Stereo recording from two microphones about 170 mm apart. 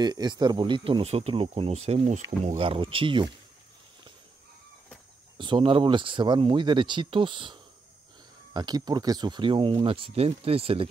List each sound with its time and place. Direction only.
0.0 s speech: 25° right (ahead or behind)
5.4 s speech: 30° right (ahead or behind)
8.5 s speech: 25° right (ahead or behind)